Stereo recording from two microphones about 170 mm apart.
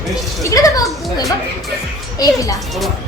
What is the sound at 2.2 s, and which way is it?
Speech, 20° left (ahead or behind).